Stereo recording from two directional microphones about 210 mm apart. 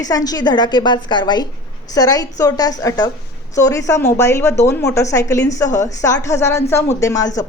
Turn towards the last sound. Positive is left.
turn(degrees=15)  # may be behind; listen again after turning